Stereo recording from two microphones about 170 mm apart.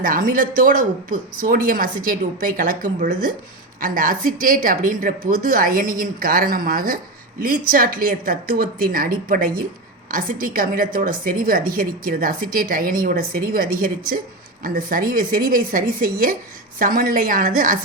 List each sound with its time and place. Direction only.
0.0 s a woman's voice: 55° right (ahead or behind)